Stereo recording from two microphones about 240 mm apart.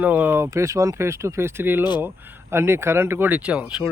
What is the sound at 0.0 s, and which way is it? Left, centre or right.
Speech, centre.